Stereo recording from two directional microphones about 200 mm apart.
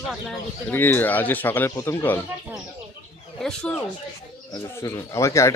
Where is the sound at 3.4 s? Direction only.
5° left (ahead or behind).